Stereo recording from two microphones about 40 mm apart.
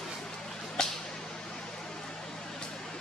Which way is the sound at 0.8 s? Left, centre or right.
Left.